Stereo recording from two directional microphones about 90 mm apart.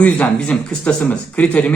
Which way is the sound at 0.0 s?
10° left (ahead or behind).